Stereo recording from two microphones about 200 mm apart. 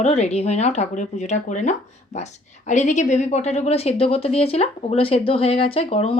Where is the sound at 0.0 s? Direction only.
30° left (ahead or behind).